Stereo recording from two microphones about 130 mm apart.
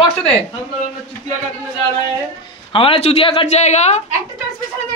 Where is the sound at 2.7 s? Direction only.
45° left (ahead or behind).